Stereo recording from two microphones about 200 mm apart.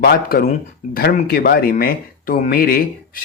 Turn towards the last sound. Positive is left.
turn(degrees=50)  # may be behind; listen again after turning